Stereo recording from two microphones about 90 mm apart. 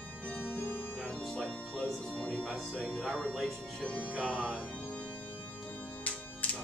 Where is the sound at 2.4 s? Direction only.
Centre (ahead or behind).